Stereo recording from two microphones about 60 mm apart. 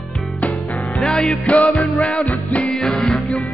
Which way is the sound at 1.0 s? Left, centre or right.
Centre.